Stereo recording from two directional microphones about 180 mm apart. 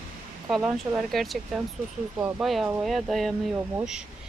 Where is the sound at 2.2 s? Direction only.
15° right (ahead or behind).